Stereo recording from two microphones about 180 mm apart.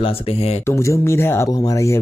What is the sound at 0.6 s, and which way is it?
Speech, 15° left (ahead or behind).